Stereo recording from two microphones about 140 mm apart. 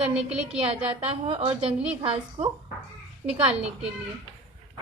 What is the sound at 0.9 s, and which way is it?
A woman's voice, 45° right (ahead or behind).